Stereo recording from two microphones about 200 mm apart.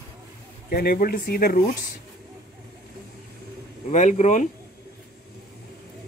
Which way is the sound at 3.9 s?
35° left (ahead or behind).